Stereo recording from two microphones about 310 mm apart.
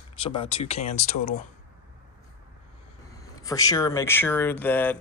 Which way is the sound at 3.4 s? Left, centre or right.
Centre.